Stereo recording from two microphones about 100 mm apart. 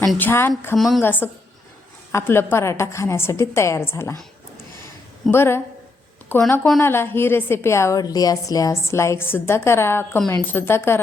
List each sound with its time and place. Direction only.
0.2 s a woman's voice: 20° left (ahead or behind)
0.8 s a woman's voice: centre (ahead or behind)
1.0 s a woman's voice: 20° left (ahead or behind)
5.3 s a woman's voice: 25° left (ahead or behind)